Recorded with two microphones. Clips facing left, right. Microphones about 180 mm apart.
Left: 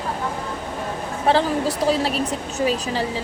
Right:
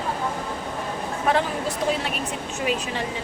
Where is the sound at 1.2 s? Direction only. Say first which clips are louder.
Left 5 dB; 35° left (ahead or behind).